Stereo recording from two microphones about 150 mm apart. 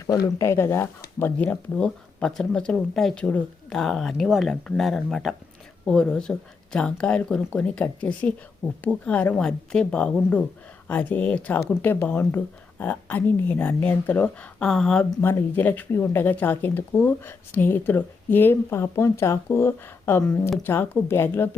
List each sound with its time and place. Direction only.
0.1 s speech: 15° left (ahead or behind)